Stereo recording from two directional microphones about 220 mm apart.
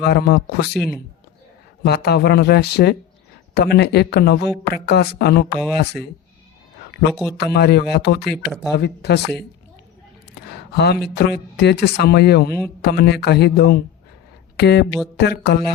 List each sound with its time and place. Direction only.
0.0 s speech: 45° left (ahead or behind)
0.7 s speech: centre (ahead or behind)
1.8 s speech: 45° left (ahead or behind)
7.1 s speech: centre (ahead or behind)
7.3 s speech: 45° left (ahead or behind)
8.3 s speech: centre (ahead or behind)
8.8 s speech: 50° left (ahead or behind)
11.1 s speech: 50° left (ahead or behind)